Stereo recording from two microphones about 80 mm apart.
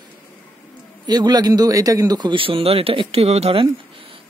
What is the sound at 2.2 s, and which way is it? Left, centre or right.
Speech, right.